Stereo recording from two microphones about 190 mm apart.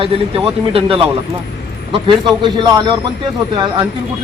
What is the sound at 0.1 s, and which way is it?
Speech, 30° right (ahead or behind).